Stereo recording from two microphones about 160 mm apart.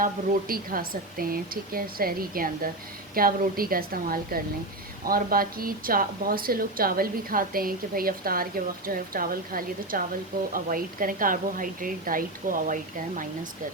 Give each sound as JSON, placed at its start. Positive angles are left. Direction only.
{"t": 0.0, "sound": "speech", "side_deg": -65}